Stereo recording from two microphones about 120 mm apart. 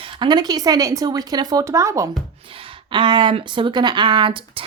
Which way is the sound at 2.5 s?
45° right (ahead or behind).